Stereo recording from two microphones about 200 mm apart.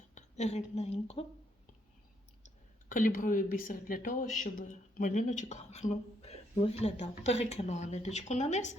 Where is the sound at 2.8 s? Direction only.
40° left (ahead or behind).